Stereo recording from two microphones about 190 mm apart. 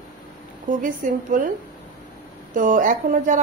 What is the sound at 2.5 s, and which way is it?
Speech, 45° right (ahead or behind).